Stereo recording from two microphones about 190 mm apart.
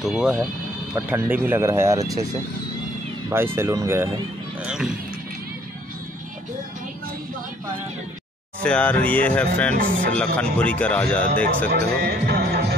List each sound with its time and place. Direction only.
0.0 s speech: 5° right (ahead or behind)
3.5 s speech: 15° right (ahead or behind)
4.6 s speech: 5° right (ahead or behind)
8.5 s speech: 5° left (ahead or behind)
11.7 s speech: 55° right (ahead or behind)